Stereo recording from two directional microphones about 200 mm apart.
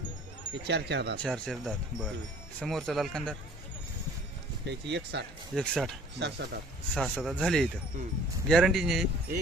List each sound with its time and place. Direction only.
0.5 s speech: 60° right (ahead or behind)
1.2 s speech: centre (ahead or behind)
4.6 s speech: 60° right (ahead or behind)
5.5 s speech: centre (ahead or behind)
6.1 s speech: 60° right (ahead or behind)
6.9 s speech: centre (ahead or behind)